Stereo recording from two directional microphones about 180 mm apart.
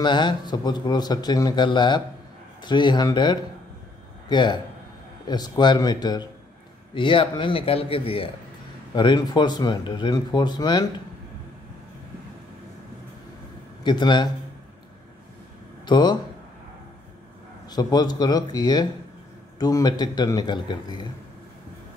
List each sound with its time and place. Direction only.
0.0 s a man's voice: 25° left (ahead or behind)
13.8 s speech: 25° left (ahead or behind)
15.8 s speech: 25° left (ahead or behind)
17.6 s speech: 20° left (ahead or behind)